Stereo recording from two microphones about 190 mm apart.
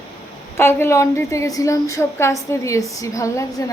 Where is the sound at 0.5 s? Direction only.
10° left (ahead or behind).